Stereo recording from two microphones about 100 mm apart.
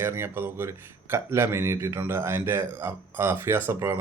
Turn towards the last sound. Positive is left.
turn(degrees=-25)  # may be behind; listen again after turning